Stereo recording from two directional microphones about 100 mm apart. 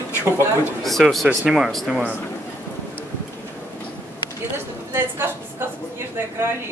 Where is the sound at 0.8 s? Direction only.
Centre (ahead or behind).